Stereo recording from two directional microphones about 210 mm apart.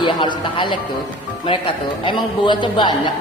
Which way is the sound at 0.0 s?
20° left (ahead or behind).